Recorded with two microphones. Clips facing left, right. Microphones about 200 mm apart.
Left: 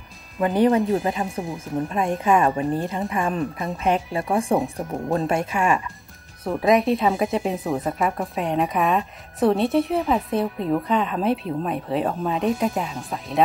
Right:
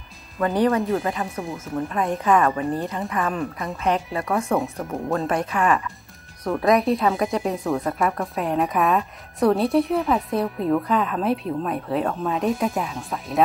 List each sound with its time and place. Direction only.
0.4 s speech: 15° left (ahead or behind)
4.2 s speech: 30° left (ahead or behind)
4.8 s speech: 10° left (ahead or behind)
6.5 s speech: centre (ahead or behind)